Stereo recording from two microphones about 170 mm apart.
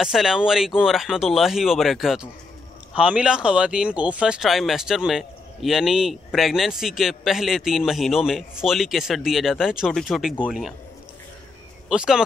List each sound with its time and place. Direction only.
0.0 s speech: 5° right (ahead or behind)
11.9 s speech: 5° right (ahead or behind)